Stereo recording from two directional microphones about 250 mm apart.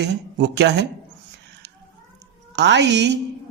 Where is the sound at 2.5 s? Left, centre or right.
Right.